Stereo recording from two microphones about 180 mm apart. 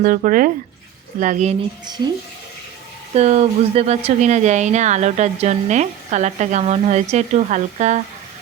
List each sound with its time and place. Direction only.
0.0 s speech: 50° right (ahead or behind)
2.0 s speech: 25° right (ahead or behind)
3.2 s speech: 40° right (ahead or behind)